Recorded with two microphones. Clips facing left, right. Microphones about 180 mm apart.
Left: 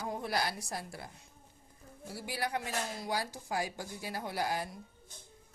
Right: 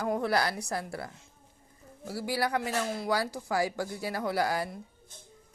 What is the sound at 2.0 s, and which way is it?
Speech, 85° right.